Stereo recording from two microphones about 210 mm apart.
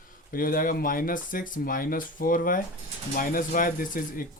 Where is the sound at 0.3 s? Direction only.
40° left (ahead or behind).